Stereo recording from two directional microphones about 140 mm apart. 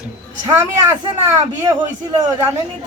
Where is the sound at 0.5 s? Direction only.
20° right (ahead or behind).